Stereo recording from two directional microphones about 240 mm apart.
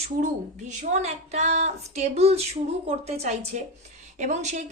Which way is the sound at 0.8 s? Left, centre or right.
Right.